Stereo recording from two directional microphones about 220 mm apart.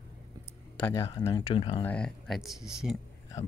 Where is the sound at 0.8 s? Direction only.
10° left (ahead or behind).